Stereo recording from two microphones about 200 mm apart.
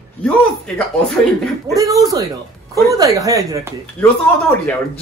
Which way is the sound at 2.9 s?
15° right (ahead or behind).